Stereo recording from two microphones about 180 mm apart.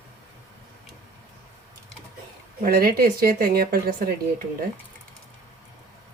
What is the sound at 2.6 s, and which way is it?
A woman's voice, 55° right (ahead or behind).